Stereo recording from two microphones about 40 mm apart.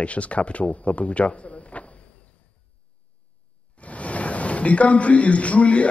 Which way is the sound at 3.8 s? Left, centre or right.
Left.